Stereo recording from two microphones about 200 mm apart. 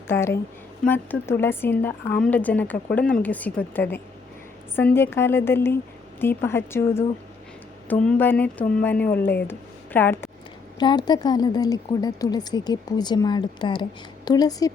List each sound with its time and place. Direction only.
0.1 s speech: 15° left (ahead or behind)
10.8 s a woman's voice: 20° left (ahead or behind)